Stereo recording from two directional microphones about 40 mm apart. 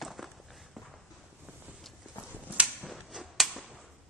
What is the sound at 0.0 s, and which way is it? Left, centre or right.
Walk, centre.